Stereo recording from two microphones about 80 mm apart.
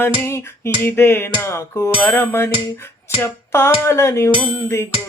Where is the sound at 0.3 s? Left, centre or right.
Left.